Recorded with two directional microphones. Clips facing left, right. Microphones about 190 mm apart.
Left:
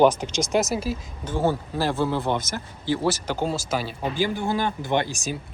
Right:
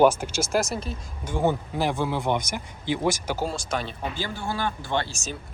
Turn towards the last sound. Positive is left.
turn(degrees=15)  # may be behind; listen again after turning